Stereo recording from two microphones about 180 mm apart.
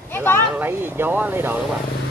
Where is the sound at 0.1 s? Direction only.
10° left (ahead or behind).